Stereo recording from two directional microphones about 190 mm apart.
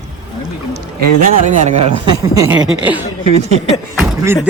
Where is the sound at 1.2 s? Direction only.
40° right (ahead or behind).